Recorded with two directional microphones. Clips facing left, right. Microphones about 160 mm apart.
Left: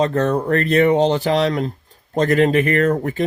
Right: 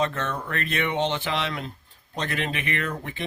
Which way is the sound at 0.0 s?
35° left (ahead or behind).